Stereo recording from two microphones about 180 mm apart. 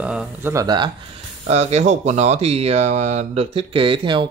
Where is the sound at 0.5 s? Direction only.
25° right (ahead or behind).